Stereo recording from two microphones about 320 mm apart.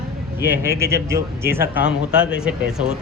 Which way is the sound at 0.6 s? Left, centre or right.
Centre.